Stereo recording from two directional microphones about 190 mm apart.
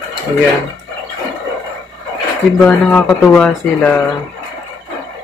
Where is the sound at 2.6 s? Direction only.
5° left (ahead or behind).